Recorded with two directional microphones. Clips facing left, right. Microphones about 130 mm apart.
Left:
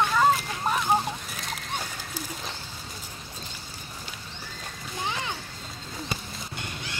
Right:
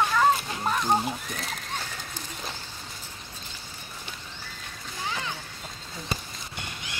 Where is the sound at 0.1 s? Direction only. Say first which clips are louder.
Even; 5° left (ahead or behind).